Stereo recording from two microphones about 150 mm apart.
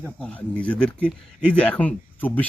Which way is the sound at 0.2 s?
10° left (ahead or behind).